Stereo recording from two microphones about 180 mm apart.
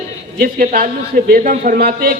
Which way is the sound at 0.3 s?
55° right (ahead or behind).